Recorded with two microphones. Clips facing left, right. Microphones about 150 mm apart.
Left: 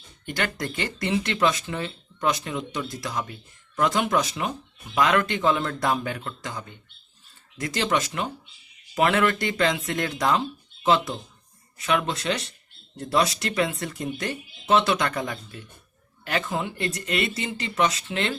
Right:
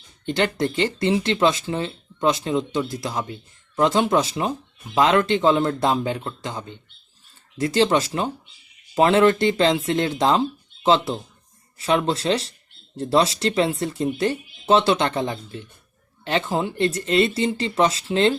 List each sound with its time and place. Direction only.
0.3 s speech: 25° right (ahead or behind)